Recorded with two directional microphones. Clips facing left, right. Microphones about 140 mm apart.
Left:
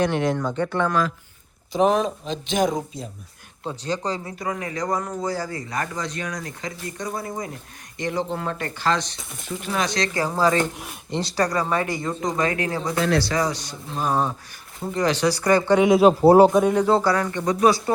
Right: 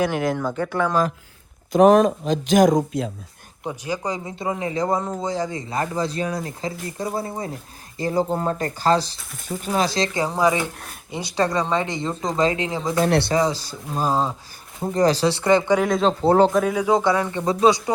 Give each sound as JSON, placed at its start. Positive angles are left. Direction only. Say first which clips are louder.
{"t": 0.0, "sound": "a man's voice", "louder": "even", "side_deg": -5}
{"t": 1.7, "sound": "speech", "louder": "right 6 dB", "side_deg": -50}
{"t": 3.6, "sound": "speech", "louder": "even", "side_deg": -15}
{"t": 11.3, "sound": "speech", "louder": "right 2 dB", "side_deg": -20}
{"t": 13.0, "sound": "speech", "louder": "right 3 dB", "side_deg": -60}
{"t": 13.2, "sound": "speech", "louder": "right 3 dB", "side_deg": -25}
{"t": 15.8, "sound": "a man's voice", "louder": "left 5 dB", "side_deg": 5}
{"t": 16.8, "sound": "speech", "louder": "even", "side_deg": -15}
{"t": 17.3, "sound": "speech", "louder": "right 1 dB", "side_deg": -30}